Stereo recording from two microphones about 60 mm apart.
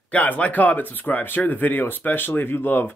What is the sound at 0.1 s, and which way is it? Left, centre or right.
Speech, left.